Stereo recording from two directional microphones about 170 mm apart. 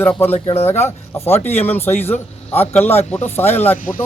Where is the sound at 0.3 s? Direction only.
40° left (ahead or behind).